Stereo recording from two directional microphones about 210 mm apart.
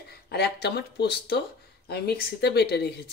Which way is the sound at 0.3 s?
50° left (ahead or behind).